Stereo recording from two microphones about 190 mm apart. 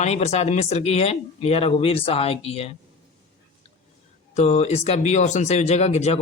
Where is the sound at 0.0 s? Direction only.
35° left (ahead or behind).